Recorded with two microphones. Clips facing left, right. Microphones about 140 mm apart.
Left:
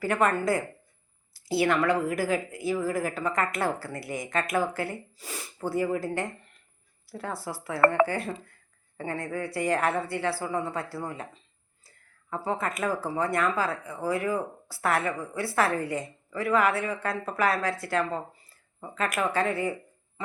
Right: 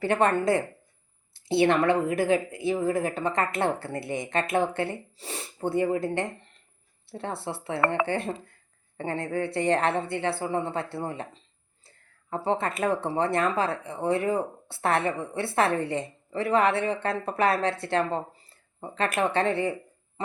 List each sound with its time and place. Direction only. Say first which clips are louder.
0.0 s speech: right 2 dB; 30° right (ahead or behind)